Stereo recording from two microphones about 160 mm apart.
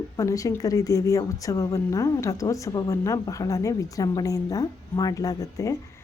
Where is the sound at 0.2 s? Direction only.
20° left (ahead or behind).